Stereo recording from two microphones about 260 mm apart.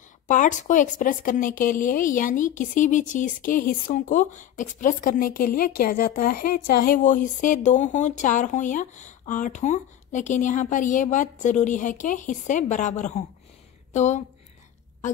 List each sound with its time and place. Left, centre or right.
0.3 s a woman's voice: left